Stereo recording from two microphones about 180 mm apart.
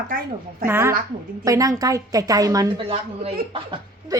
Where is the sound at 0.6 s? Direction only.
10° right (ahead or behind).